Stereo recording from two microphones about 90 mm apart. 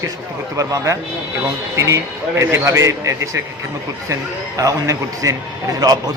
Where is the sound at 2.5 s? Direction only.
35° right (ahead or behind).